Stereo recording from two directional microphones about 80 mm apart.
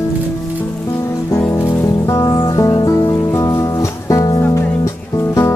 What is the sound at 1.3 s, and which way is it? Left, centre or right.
Music, left.